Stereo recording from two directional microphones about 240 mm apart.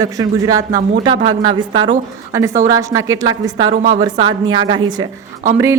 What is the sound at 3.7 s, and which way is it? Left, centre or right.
Speech, right.